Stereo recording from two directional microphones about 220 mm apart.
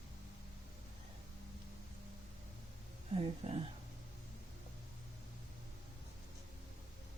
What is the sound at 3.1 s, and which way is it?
Speech, 25° right (ahead or behind).